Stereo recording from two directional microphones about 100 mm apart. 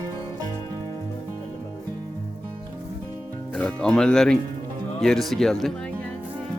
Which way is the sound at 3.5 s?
10° left (ahead or behind).